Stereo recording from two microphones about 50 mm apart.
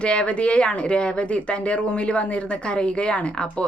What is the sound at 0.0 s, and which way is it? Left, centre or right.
A woman's voice, left.